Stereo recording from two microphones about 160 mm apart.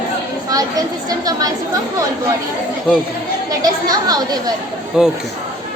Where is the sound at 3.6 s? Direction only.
25° right (ahead or behind).